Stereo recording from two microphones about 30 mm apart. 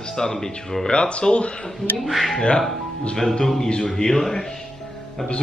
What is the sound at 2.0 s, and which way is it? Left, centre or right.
Speech, centre.